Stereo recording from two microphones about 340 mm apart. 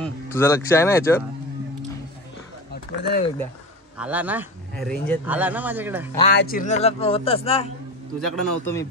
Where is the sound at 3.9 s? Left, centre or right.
Centre.